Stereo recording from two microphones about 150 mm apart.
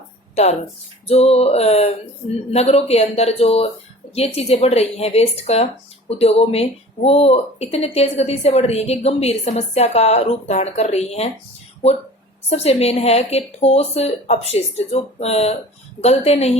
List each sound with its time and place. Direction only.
1.0 s a woman's voice: 45° left (ahead or behind)
12.5 s a woman's voice: 45° left (ahead or behind)